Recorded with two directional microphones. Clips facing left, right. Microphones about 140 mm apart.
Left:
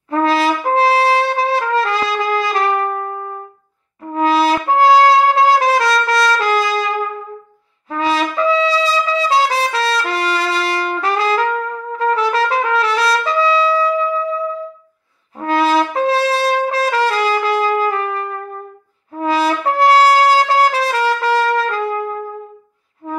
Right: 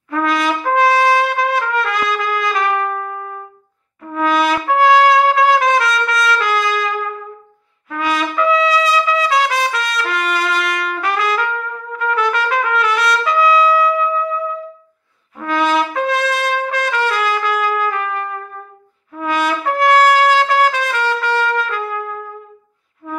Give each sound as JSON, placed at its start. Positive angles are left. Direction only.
{"t": 0.1, "sound": "trumpet", "side_deg": 30}
{"t": 4.0, "sound": "brass instrument", "side_deg": 30}
{"t": 7.9, "sound": "trumpet", "side_deg": 30}
{"t": 15.3, "sound": "brass instrument", "side_deg": 35}
{"t": 23.0, "sound": "music", "side_deg": 35}